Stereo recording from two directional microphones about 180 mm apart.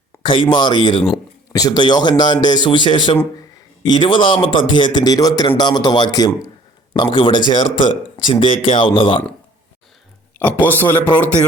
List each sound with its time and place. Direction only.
0.2 s a man's voice: 25° left (ahead or behind)
10.3 s speech: 10° left (ahead or behind)